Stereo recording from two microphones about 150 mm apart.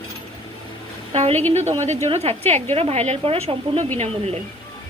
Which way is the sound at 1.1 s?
45° right (ahead or behind).